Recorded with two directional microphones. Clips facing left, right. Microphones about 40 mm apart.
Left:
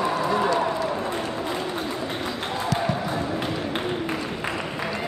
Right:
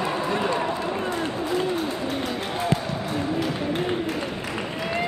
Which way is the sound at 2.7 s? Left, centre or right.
Right.